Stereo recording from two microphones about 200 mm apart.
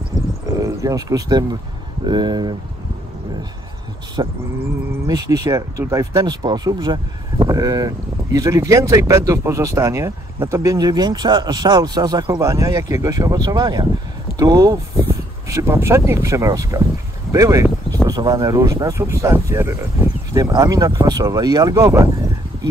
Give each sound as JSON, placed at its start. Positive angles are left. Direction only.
{"t": 0.6, "sound": "speech", "side_deg": -15}
{"t": 4.2, "sound": "speech", "side_deg": -20}